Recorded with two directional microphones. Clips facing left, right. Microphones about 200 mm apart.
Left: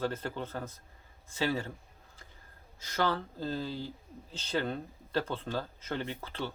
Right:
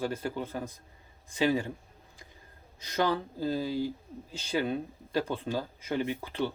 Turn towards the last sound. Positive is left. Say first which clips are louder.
# right 6 dB
turn(degrees=-15)  # may be behind; listen again after turning